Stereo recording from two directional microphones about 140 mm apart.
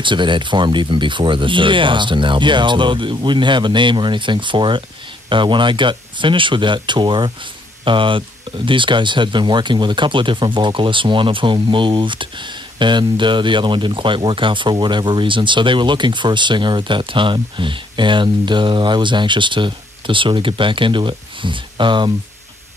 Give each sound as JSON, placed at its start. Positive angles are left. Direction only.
{"t": 0.0, "sound": "speech", "side_deg": -35}